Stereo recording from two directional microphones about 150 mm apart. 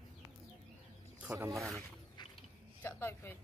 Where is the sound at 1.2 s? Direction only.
10° right (ahead or behind).